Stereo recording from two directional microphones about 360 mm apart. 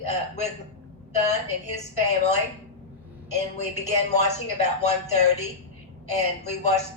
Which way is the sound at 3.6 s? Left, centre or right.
Centre.